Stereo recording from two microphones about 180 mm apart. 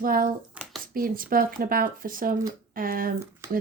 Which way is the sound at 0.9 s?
50° right (ahead or behind).